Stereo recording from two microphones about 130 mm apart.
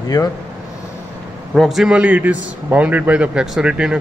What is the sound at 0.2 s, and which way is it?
Speech, 25° left (ahead or behind).